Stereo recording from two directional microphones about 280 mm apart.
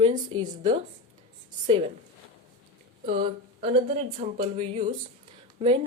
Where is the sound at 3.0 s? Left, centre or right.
Right.